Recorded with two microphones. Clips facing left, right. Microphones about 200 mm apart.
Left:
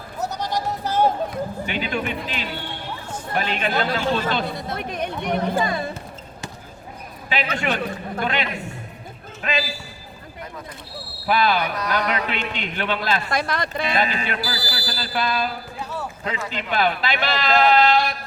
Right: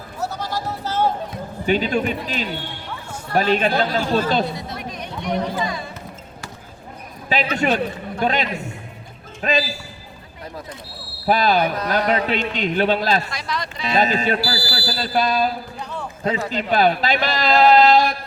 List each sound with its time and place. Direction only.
0.2 s sheep: 20° left (ahead or behind)
1.6 s speech: 40° right (ahead or behind)
4.5 s speech: 55° left (ahead or behind)
7.3 s a man's voice: 40° right (ahead or behind)
11.3 s speech: 40° right (ahead or behind)
13.3 s speech: 55° left (ahead or behind)
13.9 s a man's voice: 40° right (ahead or behind)
15.8 s basketball bounce: 5° left (ahead or behind)
16.2 s speech: 40° right (ahead or behind)